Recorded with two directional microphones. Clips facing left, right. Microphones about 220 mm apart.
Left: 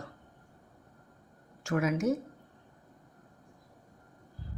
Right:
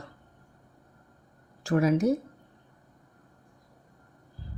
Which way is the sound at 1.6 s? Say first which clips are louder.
Right 5 dB; 35° right (ahead or behind).